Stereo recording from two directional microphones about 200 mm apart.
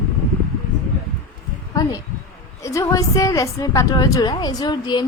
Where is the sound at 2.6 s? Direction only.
15° left (ahead or behind).